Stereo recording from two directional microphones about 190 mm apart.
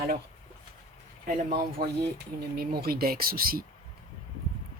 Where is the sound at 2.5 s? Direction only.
55° right (ahead or behind).